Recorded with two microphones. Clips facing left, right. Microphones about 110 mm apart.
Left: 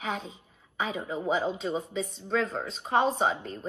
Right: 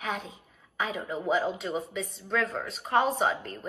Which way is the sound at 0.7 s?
25° left (ahead or behind).